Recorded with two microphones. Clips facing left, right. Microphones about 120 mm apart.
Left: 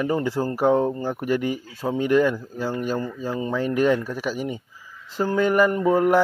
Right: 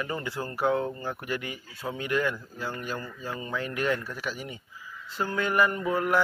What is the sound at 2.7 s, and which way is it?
Speech, 30° left (ahead or behind).